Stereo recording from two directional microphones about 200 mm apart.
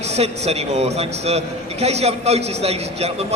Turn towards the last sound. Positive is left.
turn(degrees=-30)  # may be behind; listen again after turning